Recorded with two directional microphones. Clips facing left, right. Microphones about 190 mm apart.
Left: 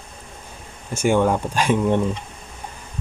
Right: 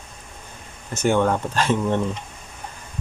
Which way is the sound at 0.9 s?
10° left (ahead or behind).